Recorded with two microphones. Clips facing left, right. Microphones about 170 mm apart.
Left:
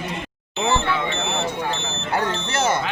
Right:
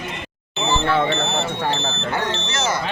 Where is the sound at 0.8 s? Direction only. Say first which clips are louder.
Right 5 dB; 30° right (ahead or behind).